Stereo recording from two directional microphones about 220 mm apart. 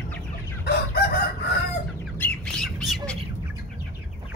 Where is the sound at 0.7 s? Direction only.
45° left (ahead or behind).